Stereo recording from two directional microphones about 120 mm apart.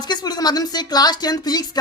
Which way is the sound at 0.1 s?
35° left (ahead or behind).